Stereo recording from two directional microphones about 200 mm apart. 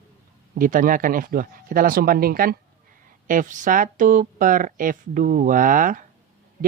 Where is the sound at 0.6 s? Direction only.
45° right (ahead or behind).